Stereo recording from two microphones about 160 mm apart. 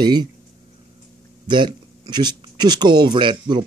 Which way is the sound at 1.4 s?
30° right (ahead or behind).